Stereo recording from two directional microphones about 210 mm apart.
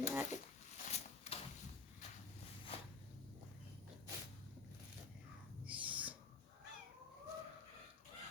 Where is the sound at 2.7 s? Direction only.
25° left (ahead or behind).